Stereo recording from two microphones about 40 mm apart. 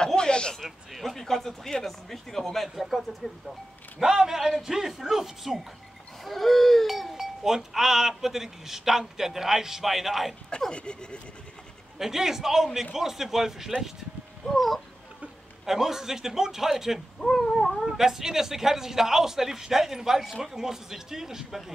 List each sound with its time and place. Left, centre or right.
0.0 s a sound: centre
0.6 s a sound: centre
1.1 s speech: centre
2.7 s speech: centre
4.0 s speech: centre
6.2 s speech: centre
10.7 s speech: left
12.0 s speech: centre
14.4 s speech: centre
15.6 s speech: centre
17.2 s cat: centre
17.8 s speech: centre